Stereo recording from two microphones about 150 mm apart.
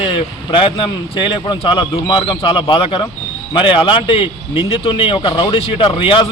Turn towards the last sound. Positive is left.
turn(degrees=35)  # may be behind; listen again after turning